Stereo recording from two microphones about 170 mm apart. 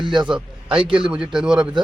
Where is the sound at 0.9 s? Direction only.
5° right (ahead or behind).